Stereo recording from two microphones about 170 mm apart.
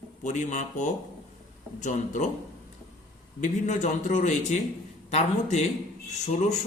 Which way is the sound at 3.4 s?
45° left (ahead or behind).